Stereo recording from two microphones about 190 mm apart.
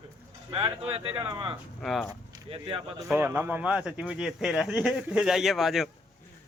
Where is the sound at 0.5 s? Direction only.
30° right (ahead or behind).